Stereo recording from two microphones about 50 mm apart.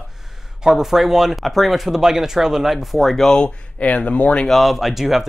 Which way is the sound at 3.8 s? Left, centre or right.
Left.